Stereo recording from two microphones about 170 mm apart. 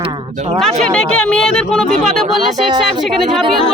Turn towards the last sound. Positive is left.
turn(degrees=0)  # may be behind; listen again after turning